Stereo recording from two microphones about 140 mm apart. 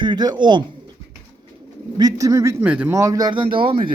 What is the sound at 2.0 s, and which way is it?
Speech, 25° right (ahead or behind).